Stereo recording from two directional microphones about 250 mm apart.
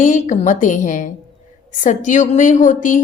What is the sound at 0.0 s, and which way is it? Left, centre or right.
A woman's voice, left.